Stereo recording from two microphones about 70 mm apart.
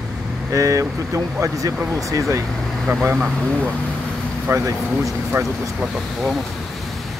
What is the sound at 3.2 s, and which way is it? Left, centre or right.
Speech, centre.